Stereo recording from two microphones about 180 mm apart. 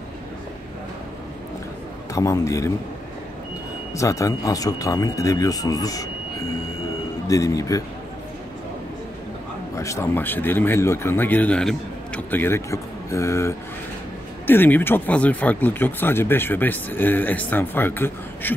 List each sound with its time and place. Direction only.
2.1 s speech: 15° left (ahead or behind)
3.9 s speech: 15° left (ahead or behind)
7.2 s speech: 20° left (ahead or behind)
9.8 s speech: 15° left (ahead or behind)